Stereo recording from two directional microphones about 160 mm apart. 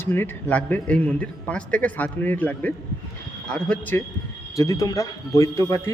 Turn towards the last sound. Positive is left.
turn(degrees=20)  # may be behind; listen again after turning